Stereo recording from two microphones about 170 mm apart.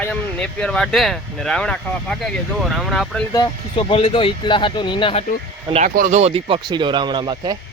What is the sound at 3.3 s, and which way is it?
Speech, 25° left (ahead or behind).